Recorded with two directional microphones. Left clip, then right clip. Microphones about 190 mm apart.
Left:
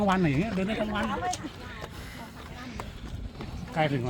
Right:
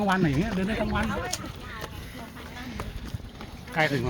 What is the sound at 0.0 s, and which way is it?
Speech, 30° left (ahead or behind).